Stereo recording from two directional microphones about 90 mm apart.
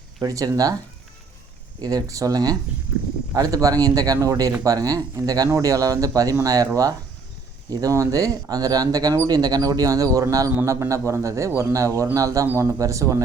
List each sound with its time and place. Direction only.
0.2 s speech: 40° right (ahead or behind)
1.8 s speech: 45° right (ahead or behind)
7.7 s speech: 40° right (ahead or behind)